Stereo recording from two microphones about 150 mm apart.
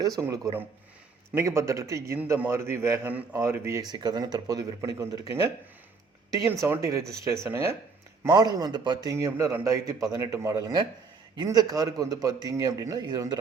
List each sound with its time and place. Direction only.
0.2 s a man's voice: 20° right (ahead or behind)